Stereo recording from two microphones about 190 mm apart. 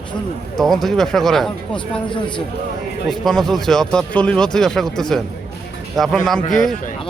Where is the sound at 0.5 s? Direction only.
Centre (ahead or behind).